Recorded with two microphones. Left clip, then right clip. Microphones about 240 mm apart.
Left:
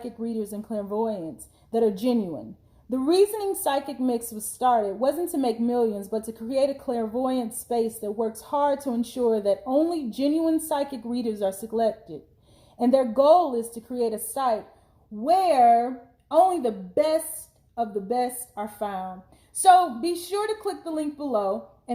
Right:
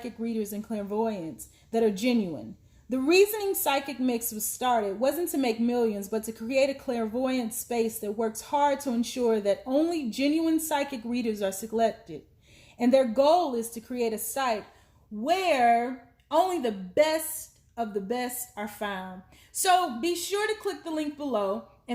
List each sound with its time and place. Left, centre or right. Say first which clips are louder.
0.0 s speech: left 2 dB; right